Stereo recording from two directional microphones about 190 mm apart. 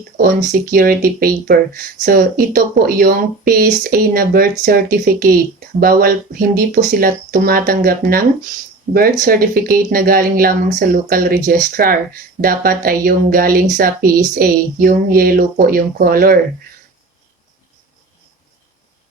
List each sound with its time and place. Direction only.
0.2 s speech: 50° right (ahead or behind)